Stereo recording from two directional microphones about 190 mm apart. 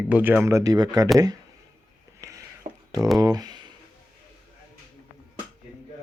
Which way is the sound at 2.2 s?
15° right (ahead or behind).